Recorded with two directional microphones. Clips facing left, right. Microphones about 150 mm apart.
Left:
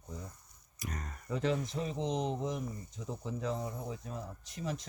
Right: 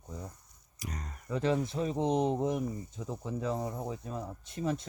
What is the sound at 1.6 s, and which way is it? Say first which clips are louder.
Speech: right 5 dB; 45° right (ahead or behind).